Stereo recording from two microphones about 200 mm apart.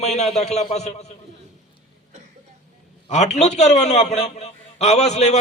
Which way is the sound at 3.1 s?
35° left (ahead or behind).